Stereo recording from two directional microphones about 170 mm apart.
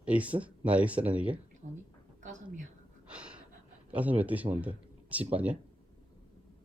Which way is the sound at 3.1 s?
5° right (ahead or behind).